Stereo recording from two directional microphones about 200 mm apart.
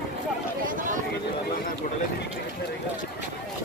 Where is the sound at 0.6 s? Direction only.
40° right (ahead or behind).